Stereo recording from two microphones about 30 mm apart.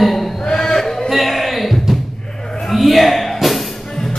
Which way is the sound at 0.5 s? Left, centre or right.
Left.